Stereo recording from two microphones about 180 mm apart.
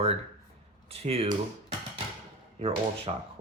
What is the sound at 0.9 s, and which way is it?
Speech, 35° right (ahead or behind).